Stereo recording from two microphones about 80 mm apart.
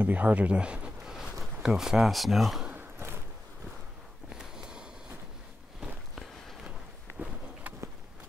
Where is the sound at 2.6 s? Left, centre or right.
Right.